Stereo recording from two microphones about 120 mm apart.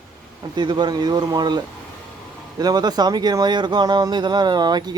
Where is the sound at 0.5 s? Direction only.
40° right (ahead or behind).